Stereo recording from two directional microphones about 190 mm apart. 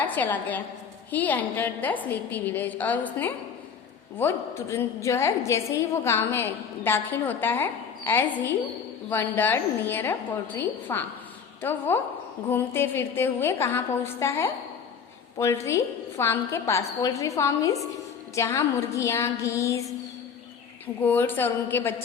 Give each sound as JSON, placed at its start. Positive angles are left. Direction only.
{"t": 0.0, "sound": "a woman's voice", "side_deg": 10}
{"t": 21.0, "sound": "a woman's voice", "side_deg": 10}